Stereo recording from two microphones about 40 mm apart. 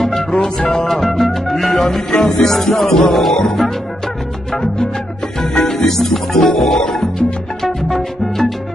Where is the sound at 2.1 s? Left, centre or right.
Centre.